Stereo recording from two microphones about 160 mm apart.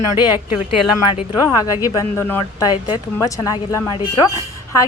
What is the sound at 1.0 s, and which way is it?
A woman's voice, 30° left (ahead or behind).